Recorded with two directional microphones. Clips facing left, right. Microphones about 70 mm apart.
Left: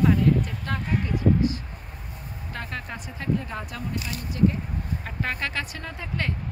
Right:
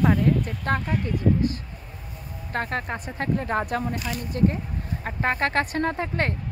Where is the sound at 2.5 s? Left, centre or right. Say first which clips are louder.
Right 7 dB; right.